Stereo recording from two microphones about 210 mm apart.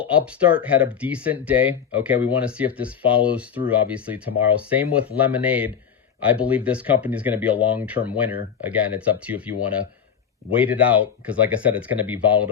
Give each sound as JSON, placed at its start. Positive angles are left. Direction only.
{"t": 0.0, "sound": "speech", "side_deg": -5}